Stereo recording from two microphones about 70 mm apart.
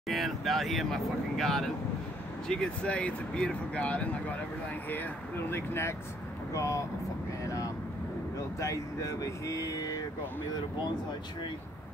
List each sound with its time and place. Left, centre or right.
0.1 s speech: centre; by 5.9 s left
6.5 s speech: left